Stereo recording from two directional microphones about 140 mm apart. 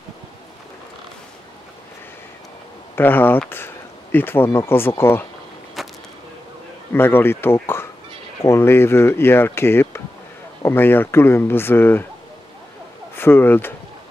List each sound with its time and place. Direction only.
3.0 s speech: 15° left (ahead or behind)
5.8 s a sound: centre (ahead or behind)
6.9 s speech: 15° left (ahead or behind)
13.1 s speech: 15° left (ahead or behind)